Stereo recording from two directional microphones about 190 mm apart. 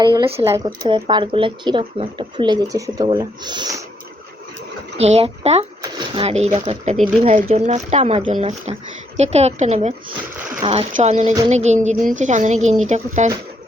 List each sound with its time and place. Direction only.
0.0 s speech: 25° right (ahead or behind)
4.9 s speech: 35° right (ahead or behind)